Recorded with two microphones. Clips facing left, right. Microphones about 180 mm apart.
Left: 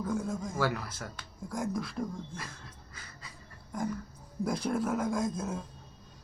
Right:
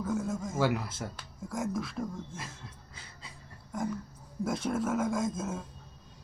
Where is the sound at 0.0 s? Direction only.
5° right (ahead or behind).